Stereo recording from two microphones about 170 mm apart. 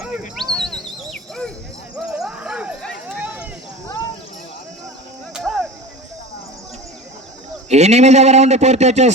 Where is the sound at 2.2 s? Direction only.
5° right (ahead or behind).